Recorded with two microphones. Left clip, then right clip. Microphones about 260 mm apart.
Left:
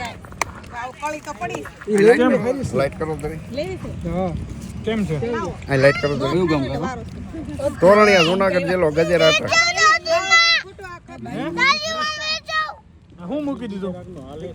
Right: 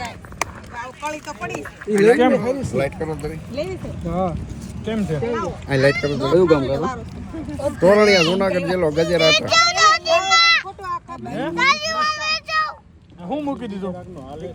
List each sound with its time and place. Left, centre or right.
0.0 s speech: centre
4.9 s speech: left
5.2 s speech: centre
11.3 s a sound: centre
13.3 s speech: centre